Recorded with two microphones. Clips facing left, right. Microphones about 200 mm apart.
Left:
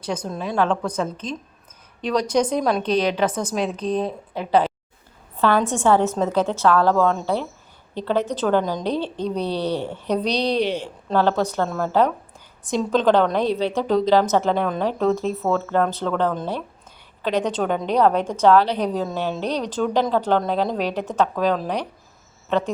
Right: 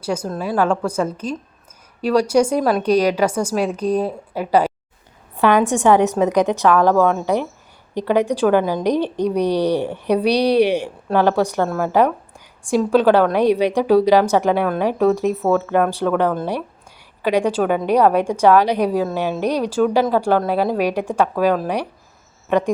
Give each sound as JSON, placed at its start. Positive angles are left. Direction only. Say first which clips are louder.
{"t": 0.0, "sound": "a woman's voice", "louder": "right 4 dB", "side_deg": -10}